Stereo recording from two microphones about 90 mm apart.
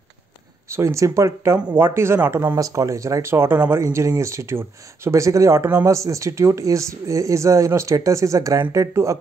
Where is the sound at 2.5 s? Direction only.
35° right (ahead or behind).